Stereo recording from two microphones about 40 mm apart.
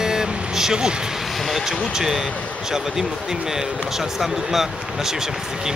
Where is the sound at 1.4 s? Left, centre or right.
Centre.